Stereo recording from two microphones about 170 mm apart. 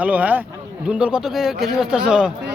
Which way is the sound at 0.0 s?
10° right (ahead or behind).